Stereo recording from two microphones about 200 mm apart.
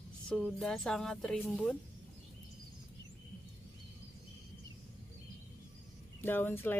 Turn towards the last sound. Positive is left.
turn(degrees=10)  # may be behind; listen again after turning